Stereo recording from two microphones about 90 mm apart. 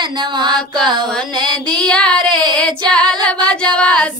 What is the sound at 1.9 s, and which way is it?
Female singing, 10° left (ahead or behind).